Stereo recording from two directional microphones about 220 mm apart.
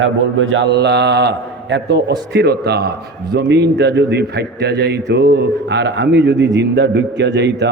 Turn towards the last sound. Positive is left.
turn(degrees=-50)  # may be behind; listen again after turning